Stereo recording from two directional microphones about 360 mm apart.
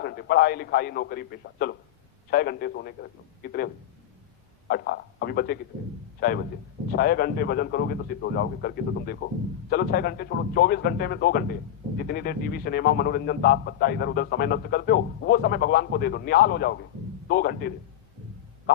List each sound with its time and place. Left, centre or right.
0.0 s a man's voice: left
4.7 s a man's voice: left